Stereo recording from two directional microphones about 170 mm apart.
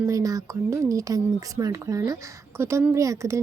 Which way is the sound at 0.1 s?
20° right (ahead or behind).